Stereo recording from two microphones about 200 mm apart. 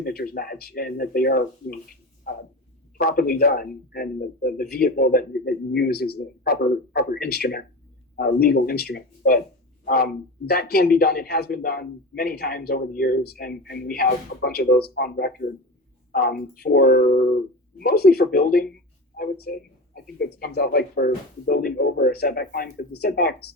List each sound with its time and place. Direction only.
0.0 s speech: 50° left (ahead or behind)
3.0 s speech: 50° left (ahead or behind)